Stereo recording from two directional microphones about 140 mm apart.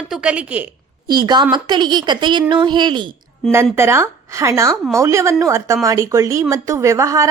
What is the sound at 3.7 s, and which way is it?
A woman's voice, 20° right (ahead or behind).